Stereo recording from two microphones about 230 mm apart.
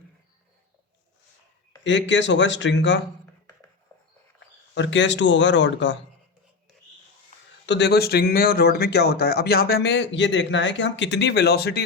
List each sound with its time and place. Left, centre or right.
1.8 s speech: left
3.9 s a sound: centre
4.7 s speech: left
7.7 s speech: left